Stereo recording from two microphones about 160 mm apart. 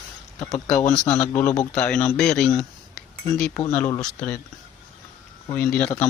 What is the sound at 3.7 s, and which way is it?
Speech, 10° left (ahead or behind).